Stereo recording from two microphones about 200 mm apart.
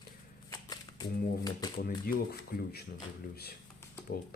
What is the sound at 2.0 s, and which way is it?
Speech, 50° left (ahead or behind).